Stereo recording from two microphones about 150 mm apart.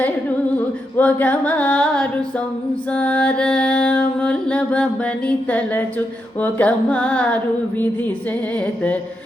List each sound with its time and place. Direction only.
0.9 s carnatic music: 10° left (ahead or behind)
2.9 s music: 10° left (ahead or behind)
8.5 s music: 10° left (ahead or behind)